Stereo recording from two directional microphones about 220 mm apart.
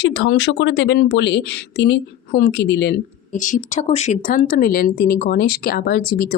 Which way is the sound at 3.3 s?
35° left (ahead or behind).